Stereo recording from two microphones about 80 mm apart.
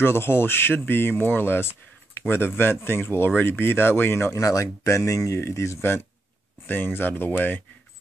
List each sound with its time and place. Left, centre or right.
0.0 s speech: left